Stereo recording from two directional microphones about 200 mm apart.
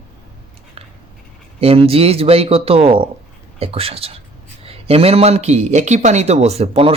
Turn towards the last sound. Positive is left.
turn(degrees=-30)  # may be behind; listen again after turning